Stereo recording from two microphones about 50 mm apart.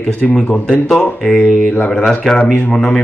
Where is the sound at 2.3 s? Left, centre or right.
Centre.